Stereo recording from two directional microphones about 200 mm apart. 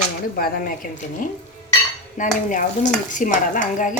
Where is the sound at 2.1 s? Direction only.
40° left (ahead or behind).